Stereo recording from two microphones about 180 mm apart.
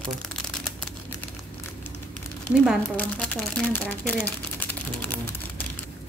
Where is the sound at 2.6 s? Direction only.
5° left (ahead or behind).